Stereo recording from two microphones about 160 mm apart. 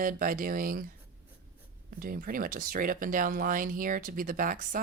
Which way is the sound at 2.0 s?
65° right (ahead or behind).